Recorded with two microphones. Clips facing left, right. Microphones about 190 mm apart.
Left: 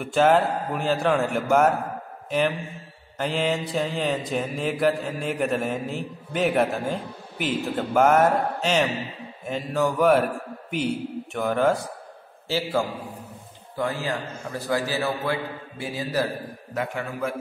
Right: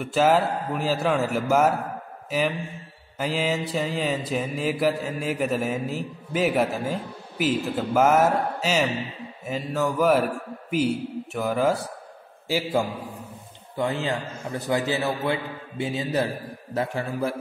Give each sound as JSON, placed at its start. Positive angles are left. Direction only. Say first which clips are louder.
{"t": 0.0, "sound": "mantra", "louder": "left 1 dB", "side_deg": 0}
{"t": 3.2, "sound": "mantra", "louder": "left 1 dB", "side_deg": -5}
{"t": 11.3, "sound": "mantra", "louder": "left 1 dB", "side_deg": -5}
{"t": 12.4, "sound": "a man's voice", "louder": "right 1 dB", "side_deg": -10}
{"t": 13.7, "sound": "a man's voice", "louder": "right 1 dB", "side_deg": -20}
{"t": 16.7, "sound": "a man's voice", "louder": "right 2 dB", "side_deg": -35}